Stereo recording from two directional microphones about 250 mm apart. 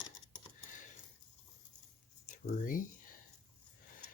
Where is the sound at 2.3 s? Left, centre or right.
Left.